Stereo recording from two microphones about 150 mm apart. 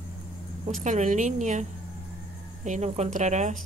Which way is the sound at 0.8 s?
55° right (ahead or behind).